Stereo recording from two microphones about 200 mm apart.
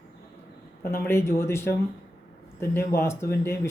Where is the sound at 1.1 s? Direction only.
10° left (ahead or behind).